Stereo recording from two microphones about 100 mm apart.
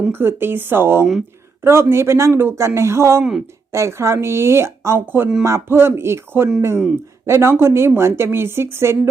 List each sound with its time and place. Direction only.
0.1 s a woman's voice: 20° right (ahead or behind)